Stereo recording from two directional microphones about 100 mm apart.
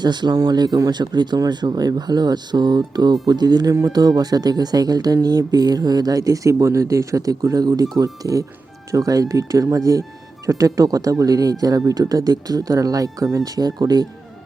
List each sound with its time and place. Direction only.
0.0 s speech: 45° right (ahead or behind)